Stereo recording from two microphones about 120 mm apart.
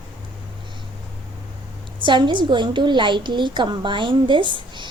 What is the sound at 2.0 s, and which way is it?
A woman's voice, 40° right (ahead or behind).